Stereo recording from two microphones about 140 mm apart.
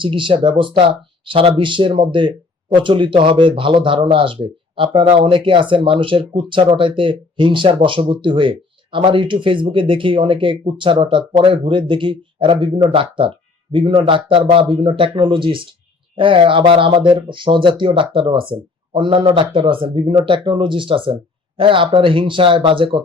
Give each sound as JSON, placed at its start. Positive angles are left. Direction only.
{"t": 0.0, "sound": "speech", "side_deg": -35}